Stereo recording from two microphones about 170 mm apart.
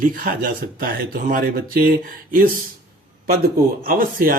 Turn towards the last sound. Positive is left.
turn(degrees=-55)  # may be behind; listen again after turning